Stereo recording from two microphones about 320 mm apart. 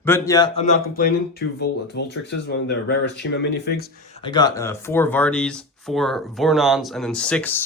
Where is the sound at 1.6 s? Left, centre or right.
Left.